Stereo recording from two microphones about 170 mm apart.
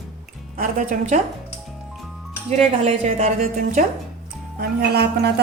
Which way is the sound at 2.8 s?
40° right (ahead or behind).